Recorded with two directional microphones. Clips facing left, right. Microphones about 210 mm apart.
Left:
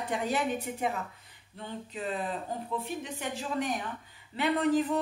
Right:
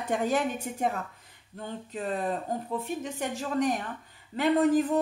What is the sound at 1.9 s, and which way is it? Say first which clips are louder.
Speech: right 4 dB; 45° right (ahead or behind).